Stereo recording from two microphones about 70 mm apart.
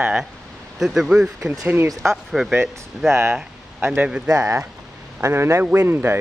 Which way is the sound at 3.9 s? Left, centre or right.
Centre.